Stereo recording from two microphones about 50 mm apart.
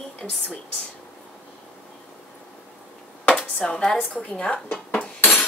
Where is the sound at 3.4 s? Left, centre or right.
Centre.